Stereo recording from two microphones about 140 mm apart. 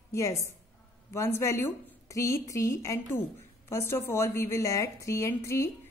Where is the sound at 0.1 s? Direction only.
20° left (ahead or behind).